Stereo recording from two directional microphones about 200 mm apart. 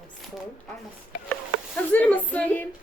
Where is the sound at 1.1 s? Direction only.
50° left (ahead or behind).